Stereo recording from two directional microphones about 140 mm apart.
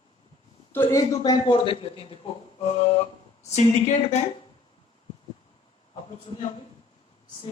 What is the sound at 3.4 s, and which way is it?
Speech, 50° left (ahead or behind).